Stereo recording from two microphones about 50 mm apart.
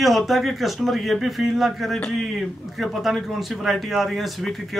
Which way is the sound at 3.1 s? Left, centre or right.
Centre.